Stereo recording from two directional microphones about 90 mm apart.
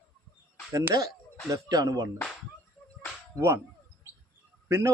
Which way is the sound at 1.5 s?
45° right (ahead or behind).